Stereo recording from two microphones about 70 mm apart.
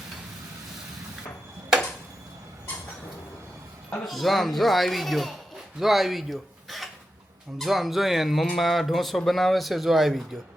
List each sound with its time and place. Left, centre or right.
4.0 s speech: centre